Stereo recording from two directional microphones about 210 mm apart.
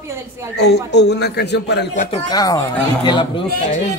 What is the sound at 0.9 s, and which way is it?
Speech, 55° left (ahead or behind).